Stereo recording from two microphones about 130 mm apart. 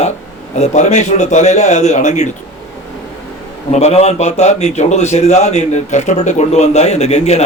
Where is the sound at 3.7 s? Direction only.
55° left (ahead or behind).